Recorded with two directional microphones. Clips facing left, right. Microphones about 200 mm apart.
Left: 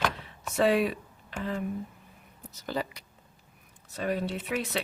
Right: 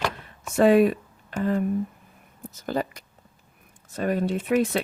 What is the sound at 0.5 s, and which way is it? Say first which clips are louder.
Speech: right 7 dB; 50° right (ahead or behind).